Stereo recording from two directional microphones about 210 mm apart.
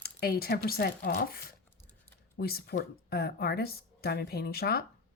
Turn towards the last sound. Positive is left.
turn(degrees=50)  # may be behind; listen again after turning